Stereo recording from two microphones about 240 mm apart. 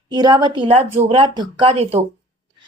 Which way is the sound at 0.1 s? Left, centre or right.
Centre.